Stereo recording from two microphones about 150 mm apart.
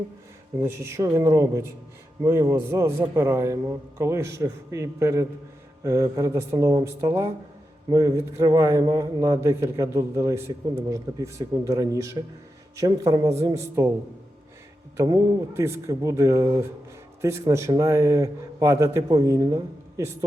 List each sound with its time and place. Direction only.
0.6 s a man's voice: 15° right (ahead or behind)
14.9 s a man's voice: 20° right (ahead or behind)